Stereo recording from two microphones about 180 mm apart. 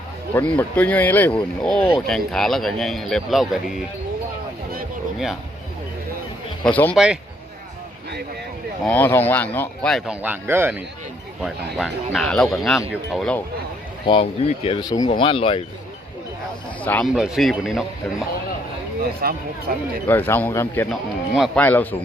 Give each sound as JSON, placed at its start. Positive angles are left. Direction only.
{"t": 0.3, "sound": "speech", "side_deg": 10}
{"t": 6.7, "sound": "speech", "side_deg": 10}
{"t": 6.9, "sound": "speech", "side_deg": -5}
{"t": 8.8, "sound": "speech", "side_deg": 10}
{"t": 10.2, "sound": "speech", "side_deg": -10}
{"t": 11.4, "sound": "speech", "side_deg": 0}
{"t": 14.0, "sound": "speech", "side_deg": 30}
{"t": 14.8, "sound": "speech", "side_deg": 20}
{"t": 16.8, "sound": "speech", "side_deg": 10}
{"t": 17.1, "sound": "speech", "side_deg": -5}
{"t": 19.2, "sound": "speech", "side_deg": -55}
{"t": 20.1, "sound": "speech", "side_deg": 10}
{"t": 20.9, "sound": "speech", "side_deg": 0}